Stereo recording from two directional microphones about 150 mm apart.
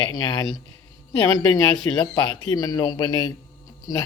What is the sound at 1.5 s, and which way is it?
Speech, 30° left (ahead or behind).